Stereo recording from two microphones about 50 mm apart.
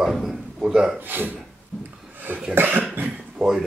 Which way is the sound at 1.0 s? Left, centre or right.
Right.